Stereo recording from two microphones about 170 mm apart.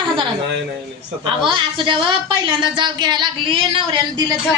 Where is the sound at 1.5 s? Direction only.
30° right (ahead or behind).